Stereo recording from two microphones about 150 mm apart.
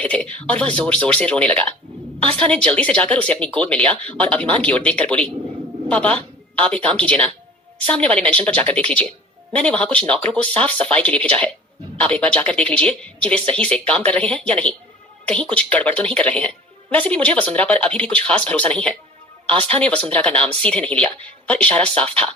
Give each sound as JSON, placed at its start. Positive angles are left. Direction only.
{"t": 0.0, "sound": "a woman's voice", "side_deg": 10}
{"t": 19.5, "sound": "a woman's voice", "side_deg": -40}
{"t": 20.7, "sound": "a woman's voice", "side_deg": 10}